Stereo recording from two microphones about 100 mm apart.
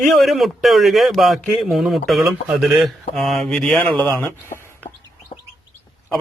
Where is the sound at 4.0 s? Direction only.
15° left (ahead or behind).